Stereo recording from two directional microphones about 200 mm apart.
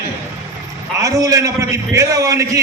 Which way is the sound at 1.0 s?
15° right (ahead or behind).